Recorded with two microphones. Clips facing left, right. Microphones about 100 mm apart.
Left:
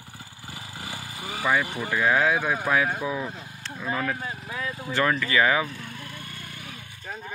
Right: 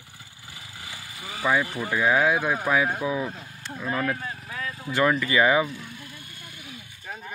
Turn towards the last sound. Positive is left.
turn(degrees=-5)  # may be behind; listen again after turning